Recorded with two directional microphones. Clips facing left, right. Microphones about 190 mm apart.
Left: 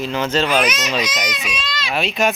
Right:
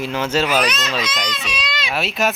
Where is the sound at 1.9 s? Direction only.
5° right (ahead or behind).